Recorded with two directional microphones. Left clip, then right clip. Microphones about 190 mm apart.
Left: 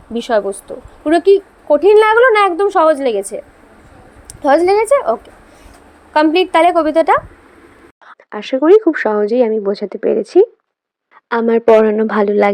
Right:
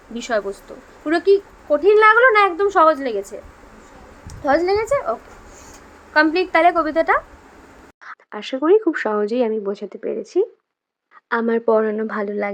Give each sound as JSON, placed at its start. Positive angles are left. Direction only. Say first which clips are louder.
{"t": 0.1, "sound": "a woman's voice", "louder": "left 7 dB", "side_deg": 20}
{"t": 6.1, "sound": "a woman's voice", "louder": "left 5 dB", "side_deg": 30}